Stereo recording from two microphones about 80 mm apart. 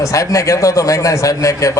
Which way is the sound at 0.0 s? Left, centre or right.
Left.